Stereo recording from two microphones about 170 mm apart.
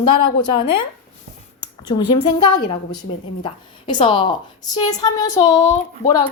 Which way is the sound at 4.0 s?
30° left (ahead or behind).